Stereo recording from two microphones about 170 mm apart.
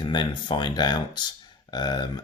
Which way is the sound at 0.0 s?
25° left (ahead or behind).